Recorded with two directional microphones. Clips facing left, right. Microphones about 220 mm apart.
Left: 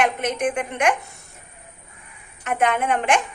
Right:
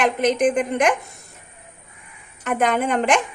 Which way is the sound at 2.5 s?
35° right (ahead or behind).